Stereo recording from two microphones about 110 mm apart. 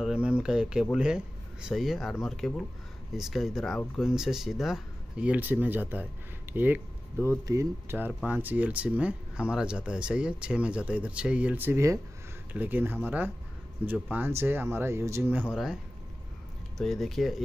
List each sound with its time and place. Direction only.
0.0 s speech: 10° right (ahead or behind)
7.4 s speech: 30° right (ahead or behind)
8.1 s speech: 15° right (ahead or behind)
15.5 s speech: 5° right (ahead or behind)